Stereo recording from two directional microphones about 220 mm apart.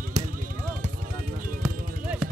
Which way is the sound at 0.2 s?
15° right (ahead or behind).